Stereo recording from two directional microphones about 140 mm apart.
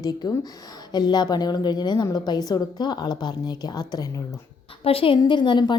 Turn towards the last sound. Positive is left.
turn(degrees=35)  # may be behind; listen again after turning